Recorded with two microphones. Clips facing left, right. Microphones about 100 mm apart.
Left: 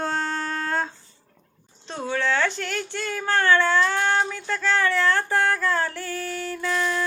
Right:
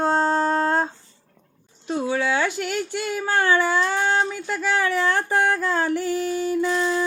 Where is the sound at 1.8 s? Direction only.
10° right (ahead or behind).